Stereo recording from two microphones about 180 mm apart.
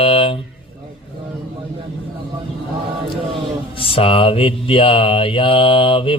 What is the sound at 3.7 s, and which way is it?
Mantra, 30° left (ahead or behind).